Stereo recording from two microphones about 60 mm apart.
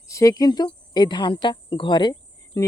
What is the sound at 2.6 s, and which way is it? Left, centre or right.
Speech, left.